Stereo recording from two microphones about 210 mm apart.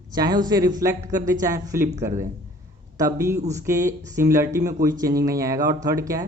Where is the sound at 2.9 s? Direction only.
15° right (ahead or behind).